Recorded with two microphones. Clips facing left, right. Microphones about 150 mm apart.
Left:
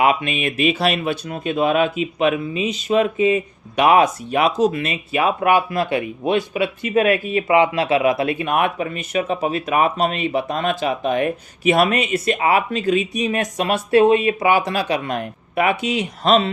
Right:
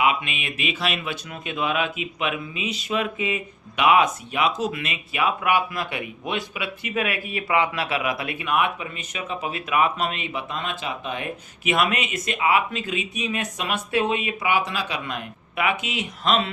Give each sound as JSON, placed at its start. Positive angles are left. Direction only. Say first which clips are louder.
{"t": 0.0, "sound": "speech", "louder": "left 5 dB", "side_deg": 40}
{"t": 7.3, "sound": "speech", "louder": "left 7 dB", "side_deg": 25}
{"t": 8.4, "sound": "speech", "louder": "left 4 dB", "side_deg": 45}
{"t": 11.6, "sound": "speech", "louder": "left 7 dB", "side_deg": 40}